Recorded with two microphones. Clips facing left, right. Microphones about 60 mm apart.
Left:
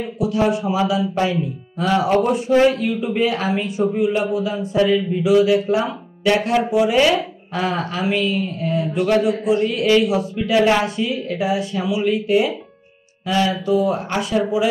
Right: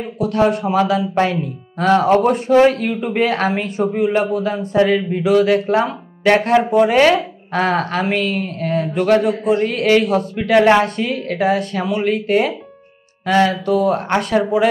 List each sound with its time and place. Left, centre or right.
0.2 s speech: right